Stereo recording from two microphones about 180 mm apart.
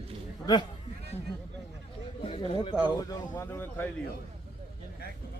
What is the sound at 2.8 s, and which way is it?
Speech, 20° left (ahead or behind).